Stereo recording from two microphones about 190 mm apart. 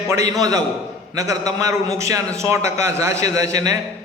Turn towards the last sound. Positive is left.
turn(degrees=-20)  # may be behind; listen again after turning